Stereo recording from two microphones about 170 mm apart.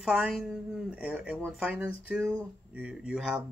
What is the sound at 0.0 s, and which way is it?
Speech, 5° right (ahead or behind).